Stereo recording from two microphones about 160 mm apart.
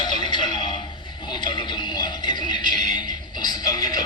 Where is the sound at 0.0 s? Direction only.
30° left (ahead or behind).